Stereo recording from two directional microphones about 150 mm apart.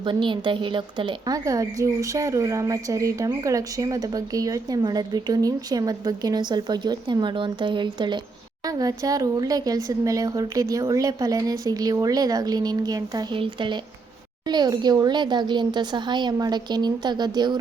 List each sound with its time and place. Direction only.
0.0 s a woman's voice: 35° right (ahead or behind)